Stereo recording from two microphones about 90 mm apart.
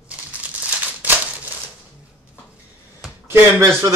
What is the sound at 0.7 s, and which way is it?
Crumpling, 20° right (ahead or behind).